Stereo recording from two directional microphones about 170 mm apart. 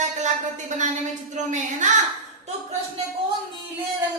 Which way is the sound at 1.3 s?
45° right (ahead or behind).